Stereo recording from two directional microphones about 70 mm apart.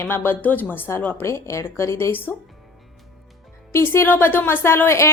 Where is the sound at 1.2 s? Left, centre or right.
Left.